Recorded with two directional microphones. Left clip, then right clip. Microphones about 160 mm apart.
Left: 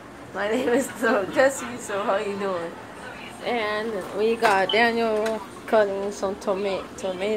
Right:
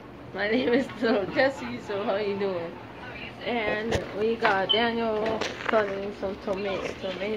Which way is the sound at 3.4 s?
5° left (ahead or behind).